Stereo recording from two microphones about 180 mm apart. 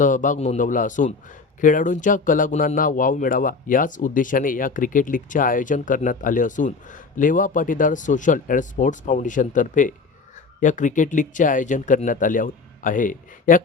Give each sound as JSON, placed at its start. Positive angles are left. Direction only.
{"t": 0.0, "sound": "speech", "side_deg": 45}